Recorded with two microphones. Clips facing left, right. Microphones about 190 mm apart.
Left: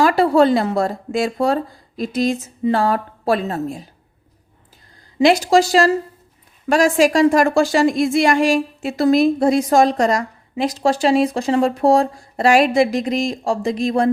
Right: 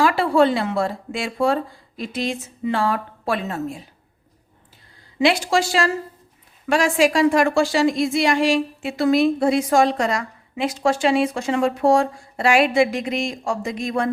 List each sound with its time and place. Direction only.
0.0 s a woman's voice: 40° left (ahead or behind)
5.2 s a woman's voice: 40° left (ahead or behind)